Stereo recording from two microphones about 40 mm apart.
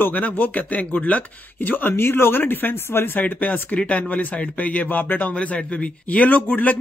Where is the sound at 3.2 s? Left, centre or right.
Left.